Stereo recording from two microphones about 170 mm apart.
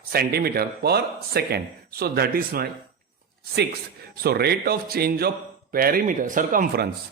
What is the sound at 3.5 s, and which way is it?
Speech, 75° right (ahead or behind).